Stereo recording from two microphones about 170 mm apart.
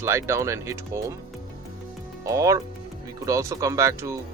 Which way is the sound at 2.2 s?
20° right (ahead or behind).